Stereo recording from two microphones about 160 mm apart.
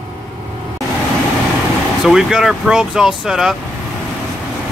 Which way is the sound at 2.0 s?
5° right (ahead or behind).